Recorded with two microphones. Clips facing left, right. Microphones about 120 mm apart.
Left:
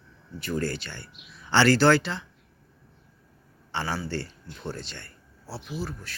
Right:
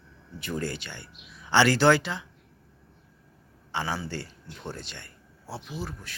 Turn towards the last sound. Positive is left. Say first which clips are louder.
# left 2 dB
turn(degrees=-20)  # may be behind; listen again after turning